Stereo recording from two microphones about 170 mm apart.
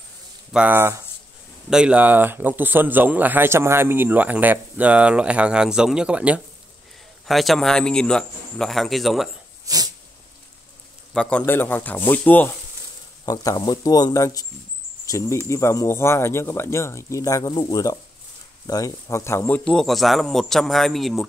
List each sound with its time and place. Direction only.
0.5 s speech: 10° right (ahead or behind)
9.7 s sneeze: 20° right (ahead or behind)
11.1 s speech: 5° left (ahead or behind)
13.2 s speech: 20° left (ahead or behind); by 21.3 s centre (ahead or behind)